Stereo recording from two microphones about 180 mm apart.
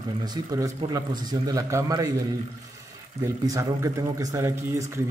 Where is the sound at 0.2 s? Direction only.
20° right (ahead or behind).